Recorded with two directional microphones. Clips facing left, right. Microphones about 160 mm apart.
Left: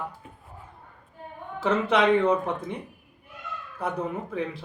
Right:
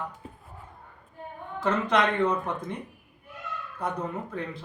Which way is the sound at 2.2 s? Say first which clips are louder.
Left 3 dB; 30° left (ahead or behind).